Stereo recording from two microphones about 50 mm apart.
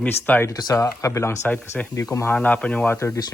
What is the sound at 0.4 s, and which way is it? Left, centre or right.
Speech, left.